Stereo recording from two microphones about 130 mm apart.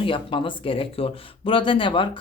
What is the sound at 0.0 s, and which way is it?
Speech, 40° left (ahead or behind).